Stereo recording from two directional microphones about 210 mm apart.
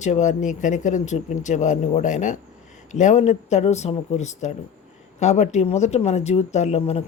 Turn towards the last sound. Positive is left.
turn(degrees=30)  # may be behind; listen again after turning